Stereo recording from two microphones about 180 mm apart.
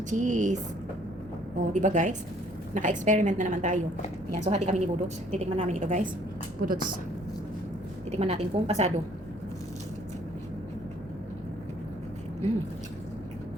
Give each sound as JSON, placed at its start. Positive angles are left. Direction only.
{"t": 0.1, "sound": "a woman's voice", "side_deg": -45}
{"t": 1.5, "sound": "a woman's voice", "side_deg": -45}
{"t": 8.1, "sound": "a woman's voice", "side_deg": -35}